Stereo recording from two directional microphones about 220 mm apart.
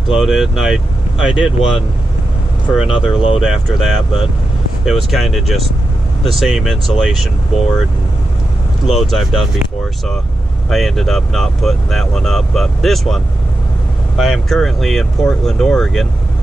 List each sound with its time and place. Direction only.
0.1 s speech: centre (ahead or behind)
2.8 s speech: 25° left (ahead or behind)
3.4 s speech: centre (ahead or behind)
8.8 s speech: centre (ahead or behind)
10.7 s speech: centre (ahead or behind)